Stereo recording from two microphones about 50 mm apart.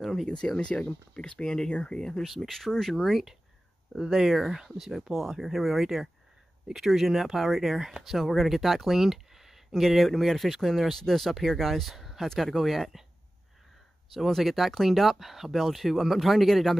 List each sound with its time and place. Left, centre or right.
0.0 s a sound: centre
0.6 s speech: centre
2.2 s speech: centre
14.1 s speech: centre